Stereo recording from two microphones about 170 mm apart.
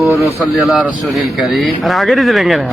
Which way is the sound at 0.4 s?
Centre (ahead or behind).